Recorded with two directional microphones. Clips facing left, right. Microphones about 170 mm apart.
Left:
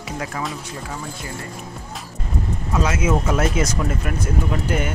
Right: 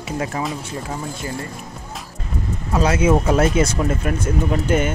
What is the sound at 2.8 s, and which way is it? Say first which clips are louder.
Speech: right 4 dB; 30° right (ahead or behind).